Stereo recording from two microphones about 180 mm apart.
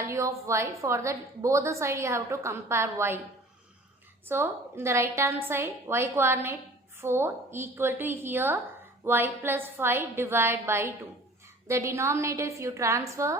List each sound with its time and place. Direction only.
0.0 s a woman's voice: 15° right (ahead or behind)
4.3 s a woman's voice: 15° right (ahead or behind)